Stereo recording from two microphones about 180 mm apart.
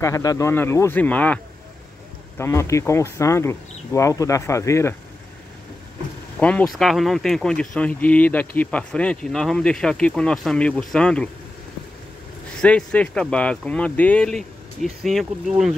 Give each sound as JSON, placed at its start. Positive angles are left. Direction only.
{"t": 0.0, "sound": "speech", "side_deg": 20}
{"t": 6.4, "sound": "speech", "side_deg": 5}
{"t": 12.5, "sound": "speech", "side_deg": 5}